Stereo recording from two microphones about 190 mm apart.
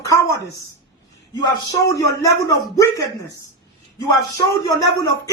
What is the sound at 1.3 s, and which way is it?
A man's voice, 20° left (ahead or behind).